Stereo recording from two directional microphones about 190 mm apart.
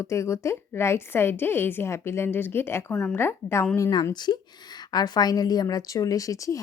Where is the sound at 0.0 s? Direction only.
15° left (ahead or behind).